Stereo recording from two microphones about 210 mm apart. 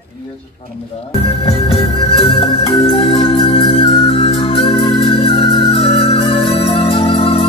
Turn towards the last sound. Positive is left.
turn(degrees=25)  # may be behind; listen again after turning